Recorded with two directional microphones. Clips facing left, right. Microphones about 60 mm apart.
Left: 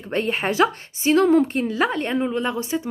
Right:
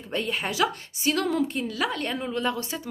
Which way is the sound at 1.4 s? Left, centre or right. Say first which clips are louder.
Left 5 dB; left.